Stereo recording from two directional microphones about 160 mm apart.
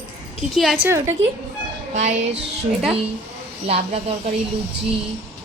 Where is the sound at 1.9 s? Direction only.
50° right (ahead or behind).